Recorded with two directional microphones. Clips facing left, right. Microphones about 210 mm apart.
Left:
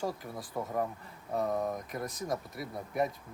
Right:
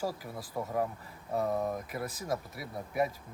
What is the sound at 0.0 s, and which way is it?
Speech, 5° right (ahead or behind).